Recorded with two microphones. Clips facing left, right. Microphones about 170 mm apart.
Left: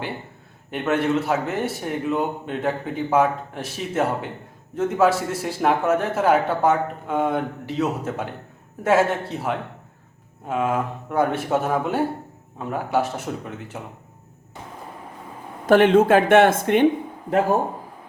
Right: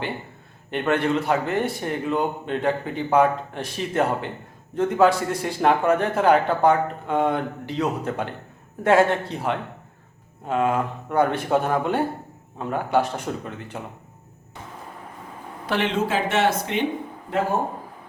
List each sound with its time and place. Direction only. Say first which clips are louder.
0.7 s a man's voice: even; centre (ahead or behind)
15.6 s speech: left 9 dB; 50° left (ahead or behind)